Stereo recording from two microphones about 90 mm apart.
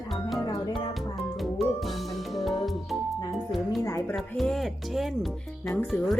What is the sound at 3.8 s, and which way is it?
Speech, 35° left (ahead or behind).